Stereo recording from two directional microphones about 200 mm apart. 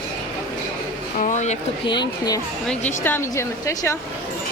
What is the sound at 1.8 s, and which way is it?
Speech, 20° left (ahead or behind).